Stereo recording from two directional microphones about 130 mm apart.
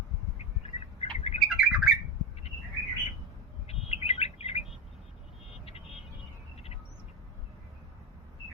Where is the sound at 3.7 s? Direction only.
50° left (ahead or behind).